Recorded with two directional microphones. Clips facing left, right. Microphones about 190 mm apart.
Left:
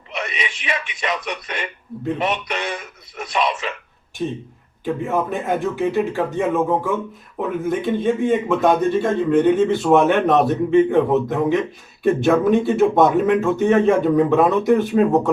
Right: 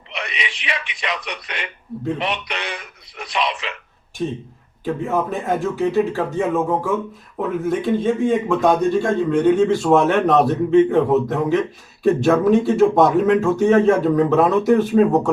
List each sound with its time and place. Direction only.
0.1 s speech: 45° left (ahead or behind)
4.2 s speech: 10° left (ahead or behind)